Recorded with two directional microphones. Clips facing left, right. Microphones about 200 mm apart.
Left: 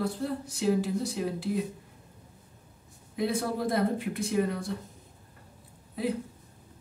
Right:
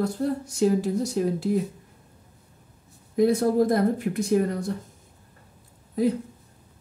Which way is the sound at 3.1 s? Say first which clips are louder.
Right 10 dB; 45° right (ahead or behind).